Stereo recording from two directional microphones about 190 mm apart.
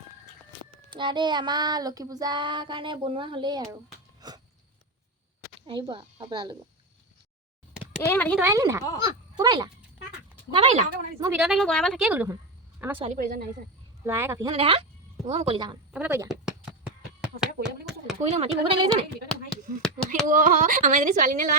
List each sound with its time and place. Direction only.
0.9 s child singing: 25° right (ahead or behind)
4.2 s a sound: 20° right (ahead or behind)
5.6 s child singing: 25° right (ahead or behind)
8.0 s speech: 10° left (ahead or behind)
8.4 s speech: 15° right (ahead or behind); by 10.8 s 30° right (ahead or behind)
11.3 s a woman's voice: centre (ahead or behind)
13.1 s speech: 50° right (ahead or behind)
14.0 s speech: 15° right (ahead or behind)
14.5 s child singing: 30° right (ahead or behind)
15.9 s speech: 10° right (ahead or behind)
16.3 s finger snapping: 5° right (ahead or behind)
18.3 s speech: 30° right (ahead or behind)
19.5 s a sound: 5° left (ahead or behind)
20.3 s speech: 45° right (ahead or behind)